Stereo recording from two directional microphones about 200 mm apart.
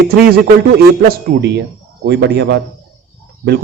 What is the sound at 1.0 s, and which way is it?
A man's voice, 50° right (ahead or behind).